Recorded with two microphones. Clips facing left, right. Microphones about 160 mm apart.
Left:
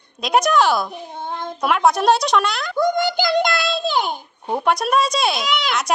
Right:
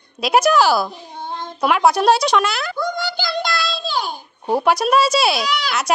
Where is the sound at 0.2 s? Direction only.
5° right (ahead or behind).